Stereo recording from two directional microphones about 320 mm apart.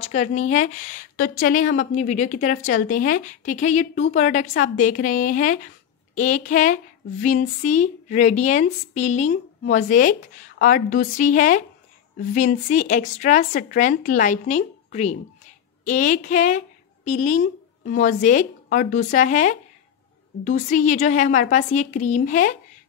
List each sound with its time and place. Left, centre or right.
0.0 s a woman's voice: left